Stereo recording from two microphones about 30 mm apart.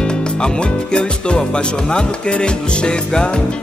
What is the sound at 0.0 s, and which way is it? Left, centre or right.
Music, left.